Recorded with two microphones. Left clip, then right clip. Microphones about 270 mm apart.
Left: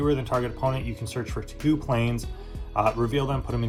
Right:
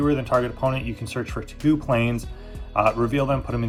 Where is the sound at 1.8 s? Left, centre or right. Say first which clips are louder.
Right 4 dB; right.